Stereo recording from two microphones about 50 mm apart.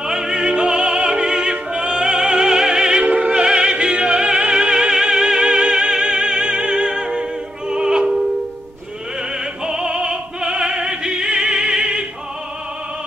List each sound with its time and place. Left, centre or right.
0.0 s opera: centre
9.4 s opera: centre